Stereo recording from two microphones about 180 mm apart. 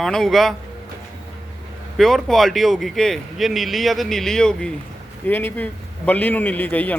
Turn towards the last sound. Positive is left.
turn(degrees=10)  # may be behind; listen again after turning